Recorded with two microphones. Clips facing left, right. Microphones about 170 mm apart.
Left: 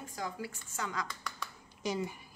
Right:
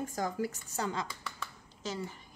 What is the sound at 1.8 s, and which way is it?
Speech, 15° left (ahead or behind).